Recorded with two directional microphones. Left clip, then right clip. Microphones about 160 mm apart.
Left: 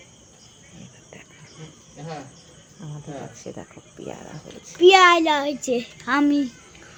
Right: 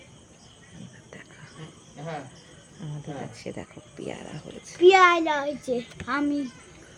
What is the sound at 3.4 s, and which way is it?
Speech, 10° right (ahead or behind).